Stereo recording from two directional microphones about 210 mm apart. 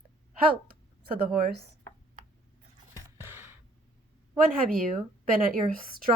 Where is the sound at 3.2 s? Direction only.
10° right (ahead or behind).